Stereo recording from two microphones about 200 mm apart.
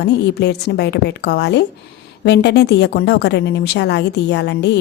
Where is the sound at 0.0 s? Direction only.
55° left (ahead or behind).